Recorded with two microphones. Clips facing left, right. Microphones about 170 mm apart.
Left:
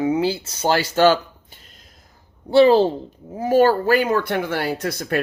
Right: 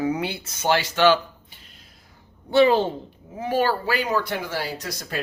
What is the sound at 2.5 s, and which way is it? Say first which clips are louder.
Speech: left 4 dB; 35° left (ahead or behind).